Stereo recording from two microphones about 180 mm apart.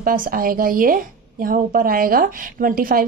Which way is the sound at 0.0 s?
50° right (ahead or behind).